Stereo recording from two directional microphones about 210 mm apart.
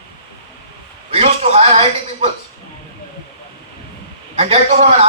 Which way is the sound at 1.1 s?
30° right (ahead or behind).